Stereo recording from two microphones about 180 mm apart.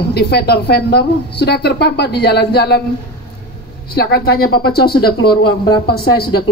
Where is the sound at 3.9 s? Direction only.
60° left (ahead or behind).